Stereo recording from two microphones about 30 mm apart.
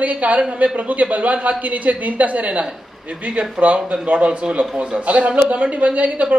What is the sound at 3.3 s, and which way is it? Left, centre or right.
A man's voice, right.